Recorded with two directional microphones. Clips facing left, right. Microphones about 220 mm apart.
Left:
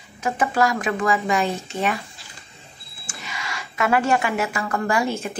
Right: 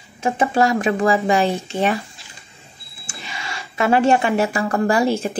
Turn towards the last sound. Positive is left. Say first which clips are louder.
# right 5 dB
turn(degrees=-30)  # may be behind; listen again after turning